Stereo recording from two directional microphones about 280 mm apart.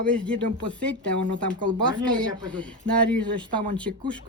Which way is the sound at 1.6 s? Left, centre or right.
Centre.